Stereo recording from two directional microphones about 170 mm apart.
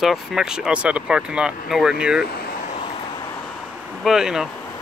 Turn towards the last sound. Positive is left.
turn(degrees=-5)  # may be behind; listen again after turning